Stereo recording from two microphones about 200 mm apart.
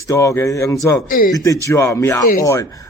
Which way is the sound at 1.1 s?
45° left (ahead or behind).